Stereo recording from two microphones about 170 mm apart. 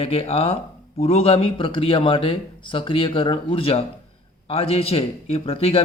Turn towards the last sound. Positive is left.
turn(degrees=35)  # may be behind; listen again after turning